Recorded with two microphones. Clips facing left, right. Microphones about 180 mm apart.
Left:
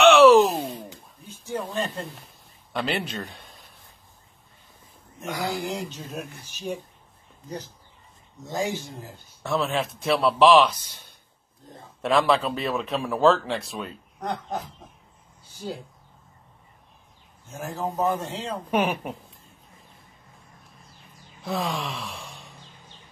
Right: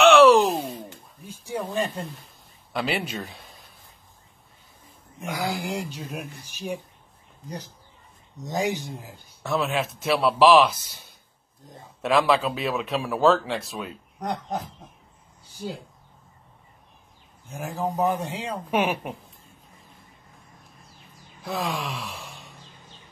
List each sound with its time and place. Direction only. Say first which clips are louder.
0.0 s a sound: left 1 dB; centre (ahead or behind)
1.3 s a sound: right 1 dB; 10° right (ahead or behind)
2.7 s a man's voice: even; 5° right (ahead or behind)
5.2 s a man's voice: even; centre (ahead or behind)
8.4 s a man's voice: right 2 dB; 20° right (ahead or behind)
9.4 s speech: even; centre (ahead or behind)
17.6 s a man's voice: right 2 dB; 15° right (ahead or behind)
18.7 s speech: even; centre (ahead or behind)
21.4 s sigh: left 1 dB; centre (ahead or behind)